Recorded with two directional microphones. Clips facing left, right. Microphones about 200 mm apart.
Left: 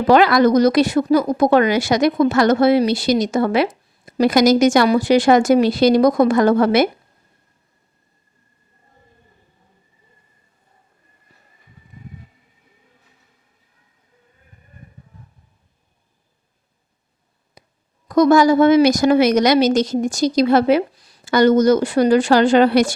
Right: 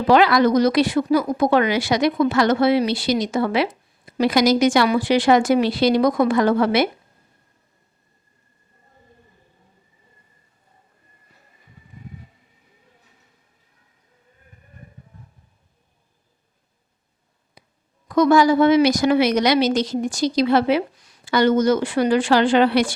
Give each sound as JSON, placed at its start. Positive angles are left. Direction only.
{"t": 0.1, "sound": "a woman's voice", "side_deg": 50}
{"t": 17.6, "sound": "a sound", "side_deg": 45}
{"t": 18.1, "sound": "a woman's voice", "side_deg": 40}